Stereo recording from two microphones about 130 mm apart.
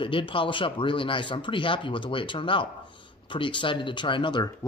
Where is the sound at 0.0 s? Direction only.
40° left (ahead or behind).